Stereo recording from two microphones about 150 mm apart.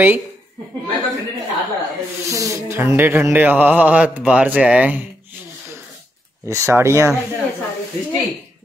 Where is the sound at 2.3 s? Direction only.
20° right (ahead or behind).